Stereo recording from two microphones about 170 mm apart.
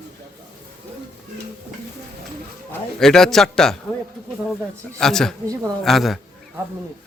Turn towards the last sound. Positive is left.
turn(degrees=0)  # may be behind; listen again after turning